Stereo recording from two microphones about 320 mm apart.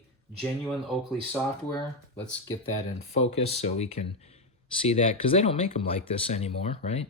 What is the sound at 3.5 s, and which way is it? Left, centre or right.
Speech, centre.